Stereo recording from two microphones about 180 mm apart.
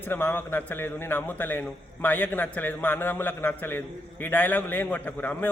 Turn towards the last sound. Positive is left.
turn(degrees=10)  # may be behind; listen again after turning